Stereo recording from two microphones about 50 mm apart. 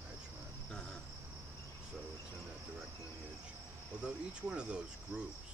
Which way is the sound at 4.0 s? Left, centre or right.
Centre.